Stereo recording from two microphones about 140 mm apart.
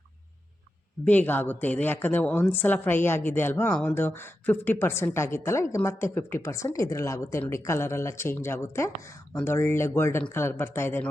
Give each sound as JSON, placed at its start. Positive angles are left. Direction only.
{"t": 1.0, "sound": "speech", "side_deg": 10}
{"t": 3.9, "sound": "a woman's voice", "side_deg": 15}